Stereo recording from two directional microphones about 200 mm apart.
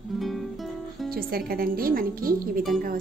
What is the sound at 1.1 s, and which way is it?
Speech, 45° right (ahead or behind).